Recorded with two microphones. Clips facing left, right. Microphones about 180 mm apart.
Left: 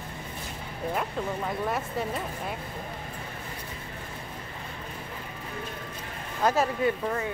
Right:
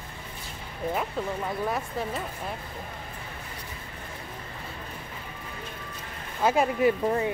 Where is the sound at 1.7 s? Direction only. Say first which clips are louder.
Even; centre (ahead or behind).